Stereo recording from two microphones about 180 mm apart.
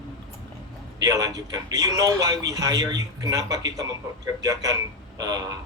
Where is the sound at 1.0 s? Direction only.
20° right (ahead or behind).